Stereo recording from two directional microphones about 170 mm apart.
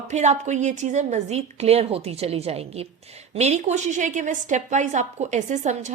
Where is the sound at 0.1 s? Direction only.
45° right (ahead or behind).